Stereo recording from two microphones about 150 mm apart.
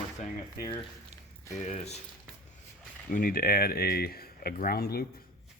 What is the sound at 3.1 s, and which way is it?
Speech, 70° left (ahead or behind).